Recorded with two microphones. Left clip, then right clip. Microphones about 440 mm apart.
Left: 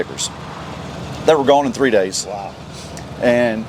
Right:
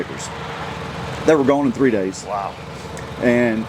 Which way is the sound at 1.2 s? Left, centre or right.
Left.